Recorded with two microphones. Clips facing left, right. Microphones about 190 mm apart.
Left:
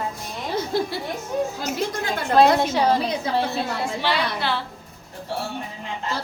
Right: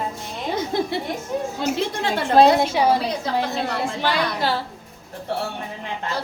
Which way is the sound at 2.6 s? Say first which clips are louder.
Right 1 dB; 10° right (ahead or behind).